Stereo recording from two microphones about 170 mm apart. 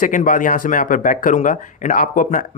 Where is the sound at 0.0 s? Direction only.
50° left (ahead or behind).